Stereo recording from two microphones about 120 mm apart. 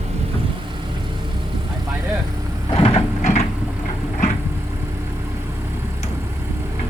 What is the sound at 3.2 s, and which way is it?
Vehicle, 75° left (ahead or behind).